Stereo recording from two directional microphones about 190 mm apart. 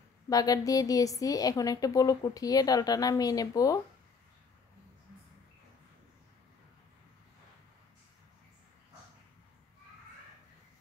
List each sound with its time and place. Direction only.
0.3 s a woman's voice: 20° left (ahead or behind)